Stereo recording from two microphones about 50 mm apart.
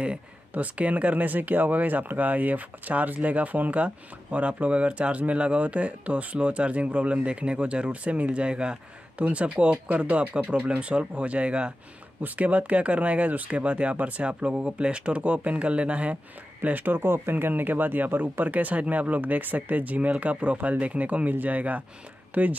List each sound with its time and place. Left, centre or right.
0.0 s speech: right
16.6 s speech: right